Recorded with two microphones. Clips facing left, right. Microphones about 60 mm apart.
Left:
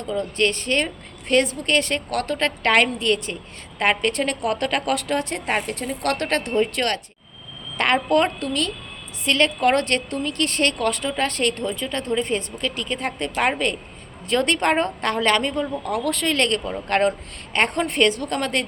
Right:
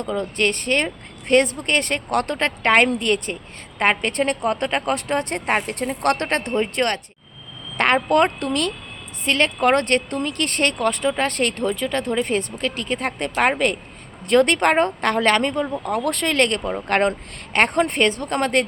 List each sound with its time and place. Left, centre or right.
0.0 s a woman's voice: right
9.2 s a woman's voice: right